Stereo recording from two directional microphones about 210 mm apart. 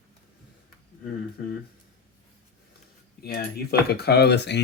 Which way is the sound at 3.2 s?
45° left (ahead or behind).